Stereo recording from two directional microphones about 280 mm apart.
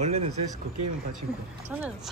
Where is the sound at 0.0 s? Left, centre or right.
Right.